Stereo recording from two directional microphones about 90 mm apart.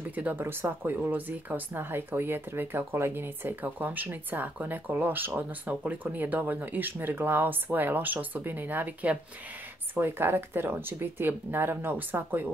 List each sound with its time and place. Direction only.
0.1 s speech: 20° right (ahead or behind)